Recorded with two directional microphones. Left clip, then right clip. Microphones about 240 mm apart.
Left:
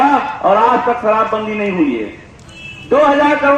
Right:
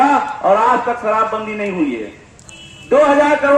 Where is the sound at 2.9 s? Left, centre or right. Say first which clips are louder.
Even; right.